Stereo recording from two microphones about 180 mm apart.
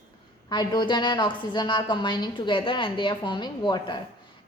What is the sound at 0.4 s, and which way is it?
A woman's voice, 25° left (ahead or behind).